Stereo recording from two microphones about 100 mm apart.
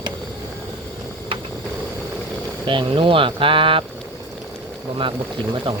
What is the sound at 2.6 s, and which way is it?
Speech, 55° right (ahead or behind).